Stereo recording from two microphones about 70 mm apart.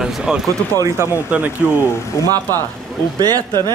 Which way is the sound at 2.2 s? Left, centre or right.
Left.